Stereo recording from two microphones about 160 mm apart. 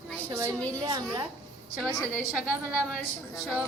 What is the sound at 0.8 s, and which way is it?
Speech, 25° right (ahead or behind).